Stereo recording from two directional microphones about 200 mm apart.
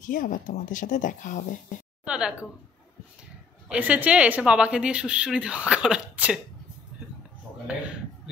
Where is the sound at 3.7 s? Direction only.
5° right (ahead or behind).